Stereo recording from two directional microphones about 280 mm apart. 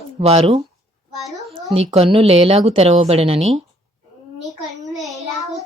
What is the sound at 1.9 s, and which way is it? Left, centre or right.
Speech, centre.